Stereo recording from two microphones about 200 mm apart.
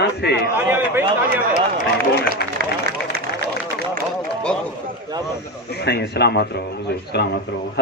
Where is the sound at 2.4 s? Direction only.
55° left (ahead or behind).